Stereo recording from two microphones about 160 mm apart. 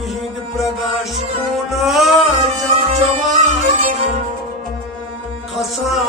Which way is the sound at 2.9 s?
45° right (ahead or behind).